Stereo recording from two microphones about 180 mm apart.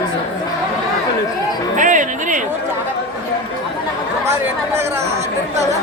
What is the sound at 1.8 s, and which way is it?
Speech, 45° right (ahead or behind).